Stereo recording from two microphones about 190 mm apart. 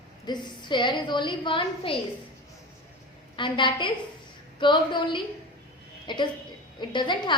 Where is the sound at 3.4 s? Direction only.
25° left (ahead or behind).